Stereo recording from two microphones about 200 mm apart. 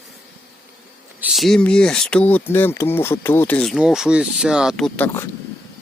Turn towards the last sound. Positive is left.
turn(degrees=10)  # may be behind; listen again after turning